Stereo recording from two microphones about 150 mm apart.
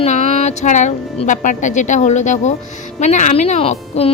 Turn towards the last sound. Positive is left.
turn(degrees=40)  # may be behind; listen again after turning